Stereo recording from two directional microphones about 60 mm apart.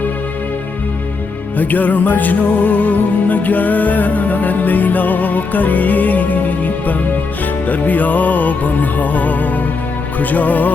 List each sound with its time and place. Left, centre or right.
1.5 s music: left
7.7 s music: left